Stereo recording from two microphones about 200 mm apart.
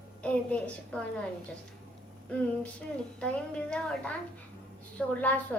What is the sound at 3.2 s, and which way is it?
A woman's voice, 5° left (ahead or behind).